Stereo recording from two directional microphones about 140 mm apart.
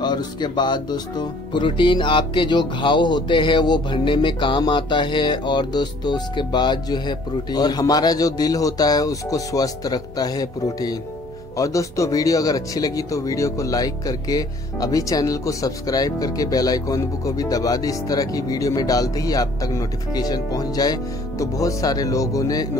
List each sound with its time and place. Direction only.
0.0 s speech: 30° left (ahead or behind)